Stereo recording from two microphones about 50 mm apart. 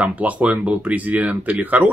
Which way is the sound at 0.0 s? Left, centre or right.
Right.